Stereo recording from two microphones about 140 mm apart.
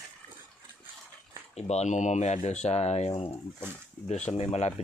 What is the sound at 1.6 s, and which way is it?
Speech, 50° left (ahead or behind).